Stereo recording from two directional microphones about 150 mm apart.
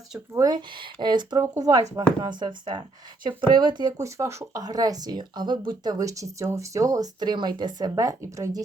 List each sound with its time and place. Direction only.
0.3 s a woman's voice: 25° right (ahead or behind)